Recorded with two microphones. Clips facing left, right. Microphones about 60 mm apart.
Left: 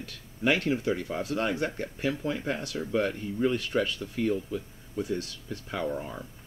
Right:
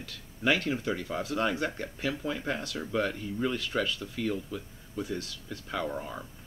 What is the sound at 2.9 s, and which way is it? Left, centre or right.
Speech, centre.